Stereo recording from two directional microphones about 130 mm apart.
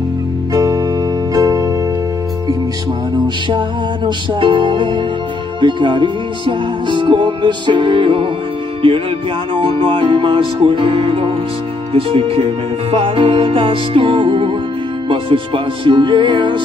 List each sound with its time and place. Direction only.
0.5 s music: 25° right (ahead or behind)
3.4 s music: 35° right (ahead or behind)
9.6 s music: 45° right (ahead or behind)